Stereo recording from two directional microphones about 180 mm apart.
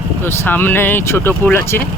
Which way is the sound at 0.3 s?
10° left (ahead or behind).